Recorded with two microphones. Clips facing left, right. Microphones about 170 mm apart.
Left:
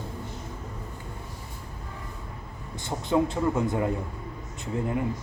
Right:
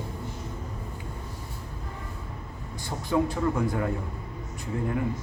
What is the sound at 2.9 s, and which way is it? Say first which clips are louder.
Speech: left 1 dB; 20° left (ahead or behind).